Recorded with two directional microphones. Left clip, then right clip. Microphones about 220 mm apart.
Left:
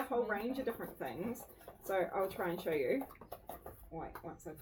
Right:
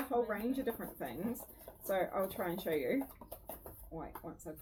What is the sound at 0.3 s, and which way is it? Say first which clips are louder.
Speech: even; 15° right (ahead or behind).